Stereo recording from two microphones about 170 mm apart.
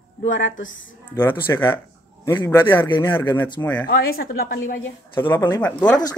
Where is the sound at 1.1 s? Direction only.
10° left (ahead or behind).